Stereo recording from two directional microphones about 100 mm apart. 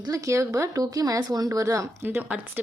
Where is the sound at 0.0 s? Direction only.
35° right (ahead or behind).